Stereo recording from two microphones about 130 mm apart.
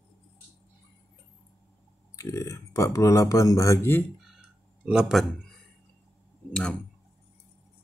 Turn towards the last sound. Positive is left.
turn(degrees=10)  # may be behind; listen again after turning